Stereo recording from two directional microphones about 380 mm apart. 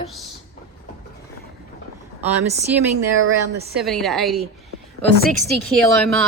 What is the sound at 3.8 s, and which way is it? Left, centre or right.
A woman's voice, centre.